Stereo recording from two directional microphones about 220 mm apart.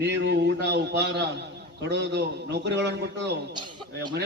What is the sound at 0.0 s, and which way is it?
A man's voice, 50° right (ahead or behind).